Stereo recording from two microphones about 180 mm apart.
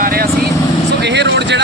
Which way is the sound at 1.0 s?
75° right (ahead or behind).